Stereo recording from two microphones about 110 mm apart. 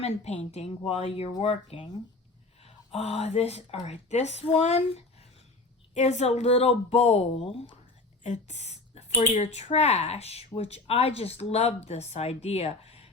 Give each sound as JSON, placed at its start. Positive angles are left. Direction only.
{"t": 0.0, "sound": "speech", "side_deg": 75}
{"t": 5.9, "sound": "speech", "side_deg": 90}
{"t": 7.4, "sound": "speech", "side_deg": 55}
{"t": 8.2, "sound": "speech", "side_deg": 90}